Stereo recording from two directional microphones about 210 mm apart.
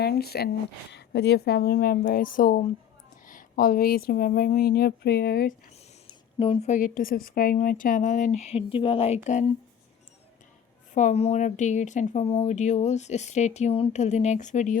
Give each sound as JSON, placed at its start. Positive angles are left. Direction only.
{"t": 0.0, "sound": "a woman's voice", "side_deg": 50}
{"t": 6.4, "sound": "speech", "side_deg": 30}
{"t": 10.9, "sound": "speech", "side_deg": 35}